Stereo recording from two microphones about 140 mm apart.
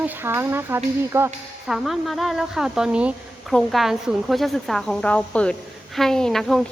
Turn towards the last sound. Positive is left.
turn(degrees=5)  # may be behind; listen again after turning